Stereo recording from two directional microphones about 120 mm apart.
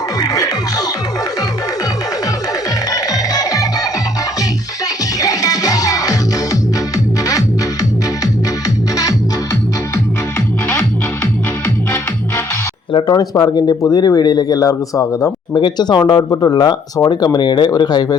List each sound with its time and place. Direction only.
0.2 s music: 30° left (ahead or behind)
2.9 s music: 30° left (ahead or behind)
5.2 s music: 30° left (ahead or behind)
10.7 s music: 15° left (ahead or behind)
12.9 s speech: 40° left (ahead or behind)